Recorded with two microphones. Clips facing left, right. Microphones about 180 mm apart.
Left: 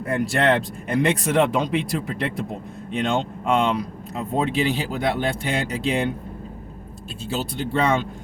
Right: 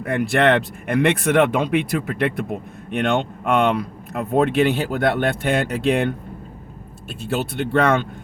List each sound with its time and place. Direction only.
0.0 s speech: 60° right (ahead or behind)
7.2 s speech: 60° right (ahead or behind)